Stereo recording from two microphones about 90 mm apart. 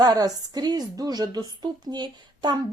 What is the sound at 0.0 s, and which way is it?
A woman's voice, 45° right (ahead or behind).